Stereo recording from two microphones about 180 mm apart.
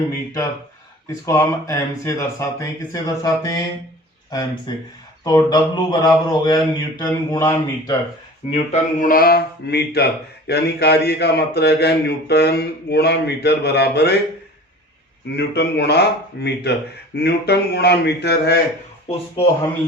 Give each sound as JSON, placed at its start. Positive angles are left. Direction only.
{"t": 1.2, "sound": "speech", "side_deg": 15}
{"t": 8.4, "sound": "speech", "side_deg": 35}
{"t": 15.4, "sound": "speech", "side_deg": 70}
{"t": 19.4, "sound": "speech", "side_deg": 30}